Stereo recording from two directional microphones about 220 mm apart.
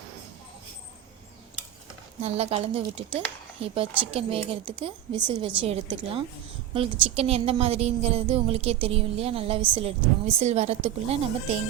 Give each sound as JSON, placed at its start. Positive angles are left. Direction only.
{"t": 2.2, "sound": "a woman's voice", "side_deg": -30}